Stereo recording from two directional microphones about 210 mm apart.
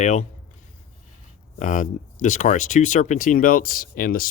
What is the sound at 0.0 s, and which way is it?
Speech, 35° left (ahead or behind).